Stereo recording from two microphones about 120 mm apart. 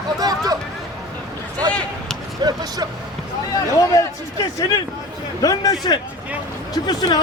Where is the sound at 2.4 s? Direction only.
30° right (ahead or behind).